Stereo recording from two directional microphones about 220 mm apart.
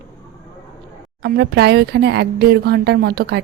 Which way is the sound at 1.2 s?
50° right (ahead or behind).